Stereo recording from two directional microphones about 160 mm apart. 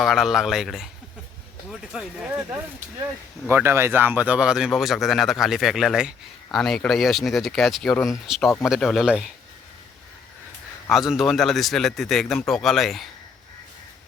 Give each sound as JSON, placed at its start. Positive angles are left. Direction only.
{"t": 0.0, "sound": "speech", "side_deg": 0}
{"t": 3.5, "sound": "speech", "side_deg": -15}
{"t": 10.8, "sound": "speech", "side_deg": 0}